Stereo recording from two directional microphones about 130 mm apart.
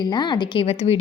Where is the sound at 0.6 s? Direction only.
55° left (ahead or behind).